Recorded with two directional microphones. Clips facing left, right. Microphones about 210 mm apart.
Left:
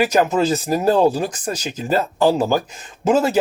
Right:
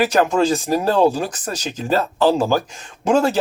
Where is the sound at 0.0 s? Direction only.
10° left (ahead or behind).